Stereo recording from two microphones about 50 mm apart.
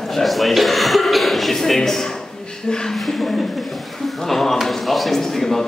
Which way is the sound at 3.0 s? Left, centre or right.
Centre.